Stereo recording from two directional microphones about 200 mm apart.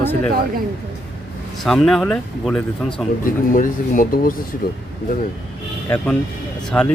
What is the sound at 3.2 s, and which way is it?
Speech, 45° left (ahead or behind).